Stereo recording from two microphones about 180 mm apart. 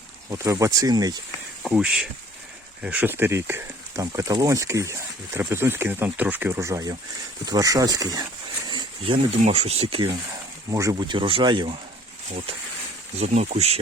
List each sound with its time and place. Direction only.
0.3 s speech: 15° right (ahead or behind)
1.6 s speech: 5° right (ahead or behind); by 10.2 s 30° right (ahead or behind)
10.7 s speech: 20° right (ahead or behind)
13.1 s speech: 40° right (ahead or behind)